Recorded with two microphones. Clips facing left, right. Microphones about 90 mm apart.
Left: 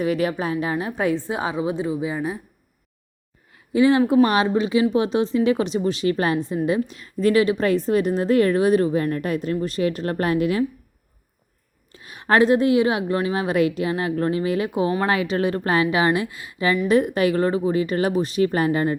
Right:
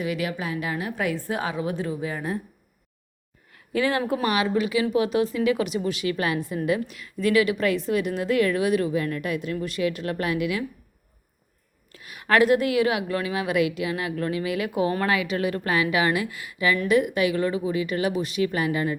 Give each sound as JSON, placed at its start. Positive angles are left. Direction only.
{"t": 0.0, "sound": "a woman's voice", "side_deg": 40}
{"t": 3.5, "sound": "a sound", "side_deg": 20}
{"t": 4.3, "sound": "a woman's voice", "side_deg": 30}
{"t": 11.9, "sound": "a woman's voice", "side_deg": 30}